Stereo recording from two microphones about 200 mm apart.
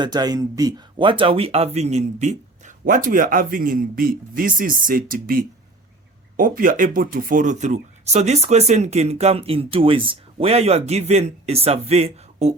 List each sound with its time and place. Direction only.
0.0 s speech: 20° right (ahead or behind)